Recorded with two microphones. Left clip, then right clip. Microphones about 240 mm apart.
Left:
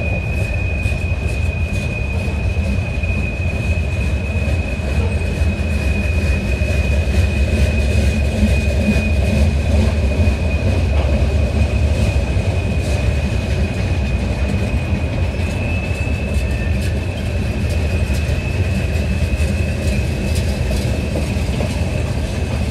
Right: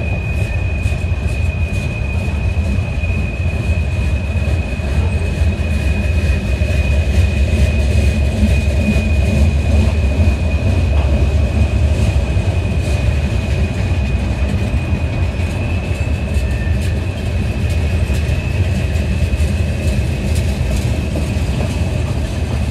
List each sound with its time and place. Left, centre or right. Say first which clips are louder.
8.4 s vehicle: left 1 dB; left